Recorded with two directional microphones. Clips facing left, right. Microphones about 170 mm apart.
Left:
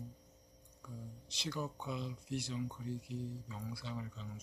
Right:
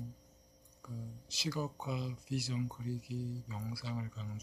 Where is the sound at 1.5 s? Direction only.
40° right (ahead or behind).